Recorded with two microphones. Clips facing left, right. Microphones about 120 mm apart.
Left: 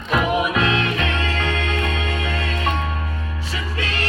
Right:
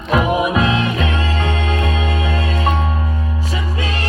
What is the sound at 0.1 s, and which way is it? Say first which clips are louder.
Music: right 4 dB; 35° right (ahead or behind).